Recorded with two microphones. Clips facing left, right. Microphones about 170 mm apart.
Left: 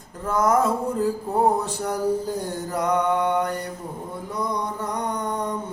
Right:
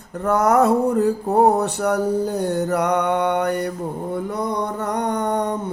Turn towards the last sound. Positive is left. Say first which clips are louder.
# right 5 dB
turn(degrees=-70)  # may be behind; listen again after turning